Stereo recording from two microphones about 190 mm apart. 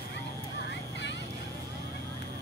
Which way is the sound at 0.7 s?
65° left (ahead or behind).